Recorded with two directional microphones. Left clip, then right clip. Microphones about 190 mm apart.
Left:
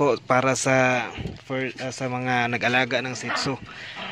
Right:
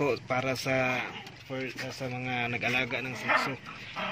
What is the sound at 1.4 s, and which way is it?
Speech, 35° left (ahead or behind).